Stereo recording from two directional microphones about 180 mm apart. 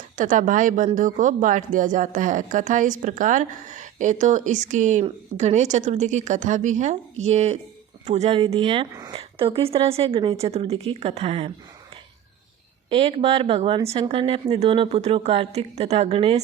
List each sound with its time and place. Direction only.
0.2 s a woman's voice: 45° right (ahead or behind)
12.9 s a woman's voice: 30° right (ahead or behind)